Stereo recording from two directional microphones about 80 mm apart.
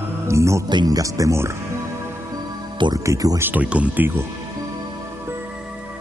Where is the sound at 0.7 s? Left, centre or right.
Right.